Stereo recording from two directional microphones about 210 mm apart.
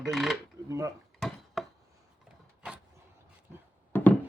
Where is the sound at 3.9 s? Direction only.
10° left (ahead or behind).